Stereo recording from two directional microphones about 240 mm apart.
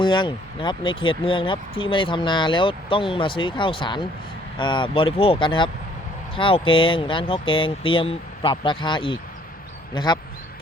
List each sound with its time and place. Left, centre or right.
0.0 s speech: centre